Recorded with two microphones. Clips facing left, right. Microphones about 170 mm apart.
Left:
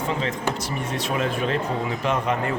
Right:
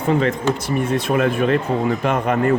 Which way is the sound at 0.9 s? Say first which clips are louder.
Right 6 dB; 55° right (ahead or behind).